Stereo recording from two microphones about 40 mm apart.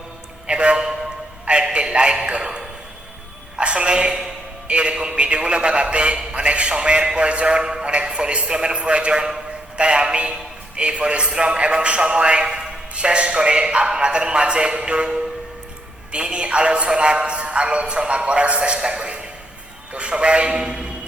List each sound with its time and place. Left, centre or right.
0.4 s a man's voice: right
3.6 s a man's voice: right